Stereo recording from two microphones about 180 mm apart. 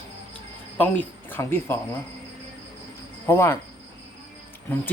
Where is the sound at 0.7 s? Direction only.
10° left (ahead or behind).